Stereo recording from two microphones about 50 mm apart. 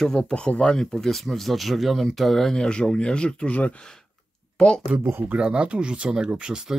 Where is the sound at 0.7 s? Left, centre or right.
Centre.